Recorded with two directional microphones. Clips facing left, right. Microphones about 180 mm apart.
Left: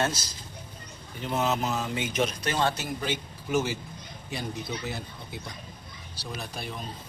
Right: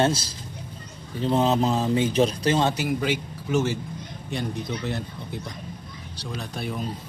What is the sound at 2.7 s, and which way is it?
Speech, 15° right (ahead or behind).